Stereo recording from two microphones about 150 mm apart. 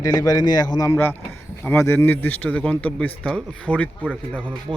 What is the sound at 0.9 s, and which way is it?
Speech, 15° left (ahead or behind).